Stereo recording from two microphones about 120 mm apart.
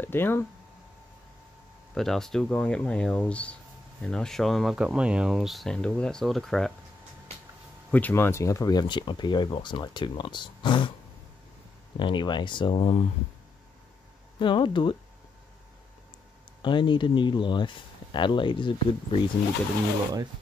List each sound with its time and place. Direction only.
0.0 s speech: 20° left (ahead or behind)
2.0 s speech: 5° left (ahead or behind)
7.9 s speech: 15° left (ahead or behind); by 10.9 s 40° left (ahead or behind)
12.0 s speech: 40° left (ahead or behind)
14.4 s speech: 45° left (ahead or behind)
16.6 s speech: 40° left (ahead or behind)